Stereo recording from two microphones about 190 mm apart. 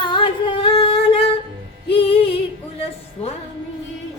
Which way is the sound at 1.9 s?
30° left (ahead or behind).